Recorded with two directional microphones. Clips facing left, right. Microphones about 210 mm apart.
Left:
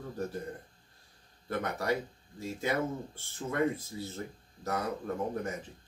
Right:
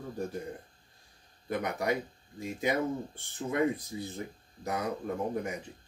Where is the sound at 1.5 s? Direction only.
15° right (ahead or behind).